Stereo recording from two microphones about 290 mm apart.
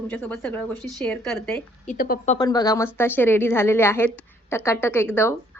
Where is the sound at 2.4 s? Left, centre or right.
Centre.